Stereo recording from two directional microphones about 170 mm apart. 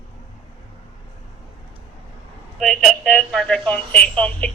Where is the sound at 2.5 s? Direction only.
Centre (ahead or behind).